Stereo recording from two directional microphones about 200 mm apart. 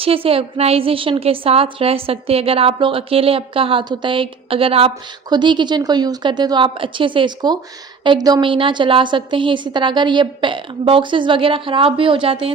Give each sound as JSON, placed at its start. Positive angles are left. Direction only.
{"t": 0.0, "sound": "a woman's voice", "side_deg": -30}